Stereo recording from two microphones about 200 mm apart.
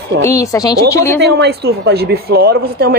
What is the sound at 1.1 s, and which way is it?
Speech, 55° right (ahead or behind).